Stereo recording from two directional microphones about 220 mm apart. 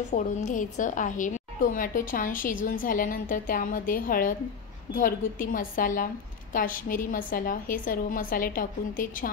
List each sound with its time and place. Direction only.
0.1 s a woman's voice: 35° left (ahead or behind)